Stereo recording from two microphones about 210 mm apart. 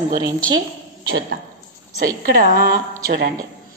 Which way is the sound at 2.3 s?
45° right (ahead or behind).